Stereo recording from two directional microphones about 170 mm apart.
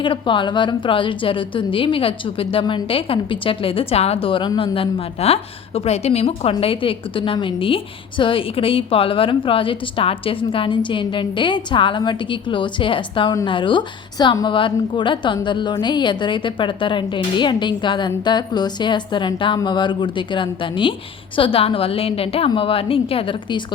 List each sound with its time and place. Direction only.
0.0 s a woman's voice: 30° left (ahead or behind)